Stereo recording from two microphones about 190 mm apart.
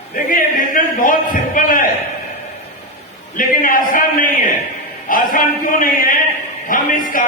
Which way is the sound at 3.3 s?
45° left (ahead or behind).